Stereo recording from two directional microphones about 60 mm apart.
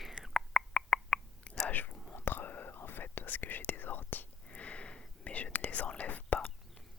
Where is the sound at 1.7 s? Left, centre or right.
Left.